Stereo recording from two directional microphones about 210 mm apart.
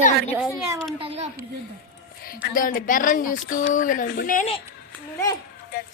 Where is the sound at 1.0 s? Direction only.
30° right (ahead or behind).